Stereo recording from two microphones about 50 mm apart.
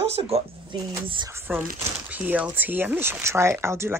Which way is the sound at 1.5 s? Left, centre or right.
Right.